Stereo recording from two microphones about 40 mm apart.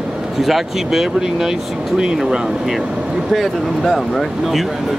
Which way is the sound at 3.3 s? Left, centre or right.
Centre.